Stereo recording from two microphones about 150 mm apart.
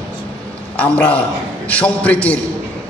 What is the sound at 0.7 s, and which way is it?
A man's voice, 10° left (ahead or behind).